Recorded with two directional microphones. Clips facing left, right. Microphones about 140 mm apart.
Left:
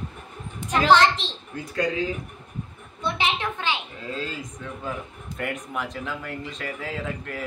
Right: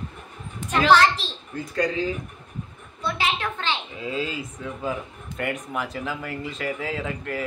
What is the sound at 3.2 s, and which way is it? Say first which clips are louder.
Speech: even; 20° left (ahead or behind).